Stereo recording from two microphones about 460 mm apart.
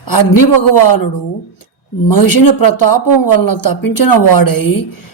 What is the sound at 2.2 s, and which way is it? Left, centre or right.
Mantra, left.